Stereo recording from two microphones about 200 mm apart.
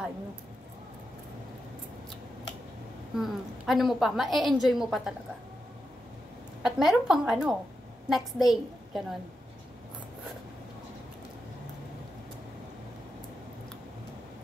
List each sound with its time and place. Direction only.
3.2 s a woman's voice: centre (ahead or behind)
6.6 s a woman's voice: centre (ahead or behind)